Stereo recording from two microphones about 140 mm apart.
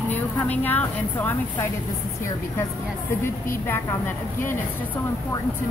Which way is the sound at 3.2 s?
15° left (ahead or behind).